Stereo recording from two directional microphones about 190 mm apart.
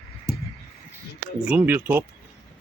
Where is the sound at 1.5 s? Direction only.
10° right (ahead or behind).